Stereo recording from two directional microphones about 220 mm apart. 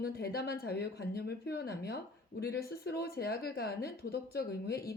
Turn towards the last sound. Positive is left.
turn(degrees=45)  # may be behind; listen again after turning